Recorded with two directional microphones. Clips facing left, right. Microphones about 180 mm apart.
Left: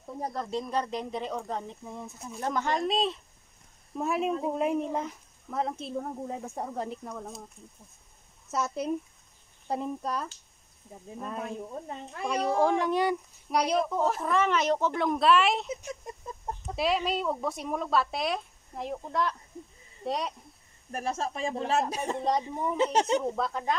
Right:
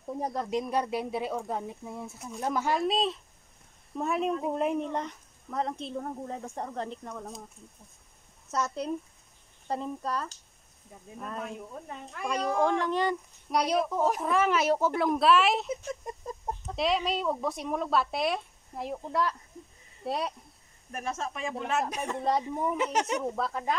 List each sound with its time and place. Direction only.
0.2 s speech: 10° right (ahead or behind); by 7.3 s 5° left (ahead or behind)
8.5 s speech: 5° left (ahead or behind)
11.4 s speech: 30° left (ahead or behind)
12.5 s speech: 10° left (ahead or behind)
13.5 s speech: centre (ahead or behind)
14.0 s speech: 10° right (ahead or behind)
16.7 s speech: centre (ahead or behind)
20.9 s speech: 35° left (ahead or behind)
23.3 s speech: 5° right (ahead or behind)